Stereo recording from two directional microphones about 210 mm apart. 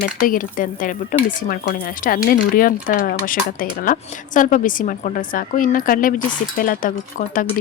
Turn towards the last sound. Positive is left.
turn(degrees=40)  # may be behind; listen again after turning